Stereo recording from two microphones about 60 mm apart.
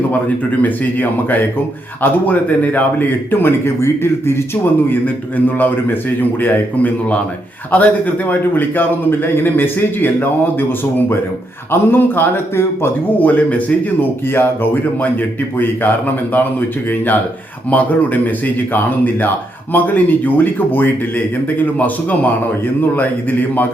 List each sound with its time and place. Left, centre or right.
0.1 s a man's voice: left
11.7 s a man's voice: left
14.3 s a man's voice: left
17.7 s a man's voice: left